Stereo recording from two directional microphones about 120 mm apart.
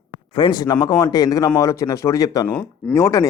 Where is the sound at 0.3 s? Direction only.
40° left (ahead or behind).